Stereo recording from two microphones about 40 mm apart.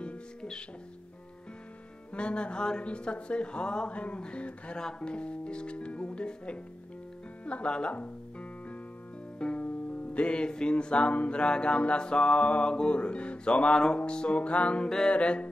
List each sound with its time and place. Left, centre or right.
0.0 s music: left
2.1 s music: left
9.4 s music: left
14.9 s music: centre
15.1 s music: left